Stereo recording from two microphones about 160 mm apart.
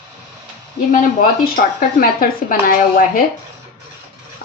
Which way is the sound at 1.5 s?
65° left (ahead or behind).